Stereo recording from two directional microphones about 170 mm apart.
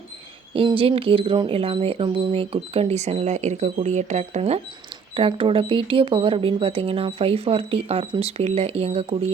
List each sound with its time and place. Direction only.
0.5 s speech: 30° right (ahead or behind)